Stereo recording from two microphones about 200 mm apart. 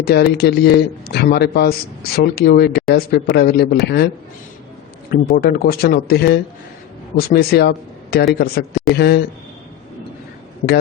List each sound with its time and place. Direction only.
0.0 s a man's voice: 55° left (ahead or behind)
5.1 s a man's voice: 50° left (ahead or behind)